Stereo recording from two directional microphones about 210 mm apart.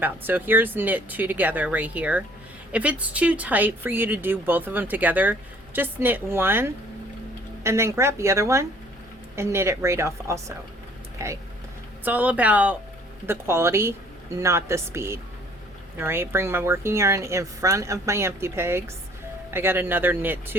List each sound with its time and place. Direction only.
0.0 s speech: 10° right (ahead or behind)